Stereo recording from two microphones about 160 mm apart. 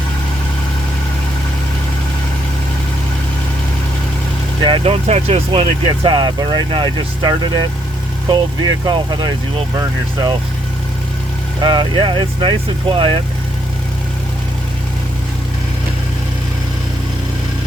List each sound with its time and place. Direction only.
4.6 s speech: 35° right (ahead or behind)
11.6 s speech: 30° right (ahead or behind)